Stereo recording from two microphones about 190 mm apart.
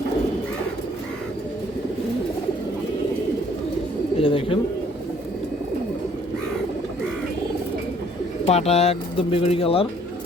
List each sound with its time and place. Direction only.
4.2 s speech: 30° left (ahead or behind)
8.4 s speech: 35° left (ahead or behind)